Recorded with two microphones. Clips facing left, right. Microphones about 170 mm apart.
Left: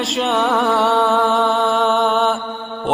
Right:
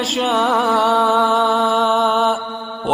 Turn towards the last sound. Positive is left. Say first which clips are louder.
# even
turn(degrees=0)  # may be behind; listen again after turning